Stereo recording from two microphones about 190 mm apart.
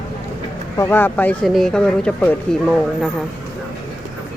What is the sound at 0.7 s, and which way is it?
Speech, 10° left (ahead or behind).